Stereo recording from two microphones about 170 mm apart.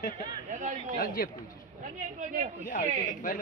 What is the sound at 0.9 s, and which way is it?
Speech, 55° left (ahead or behind).